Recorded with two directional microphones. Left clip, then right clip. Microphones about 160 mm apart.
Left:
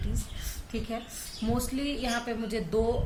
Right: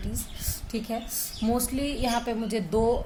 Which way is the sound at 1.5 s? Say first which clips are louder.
Right 3 dB; 45° right (ahead or behind).